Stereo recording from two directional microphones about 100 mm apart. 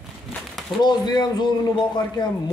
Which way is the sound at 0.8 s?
45° left (ahead or behind).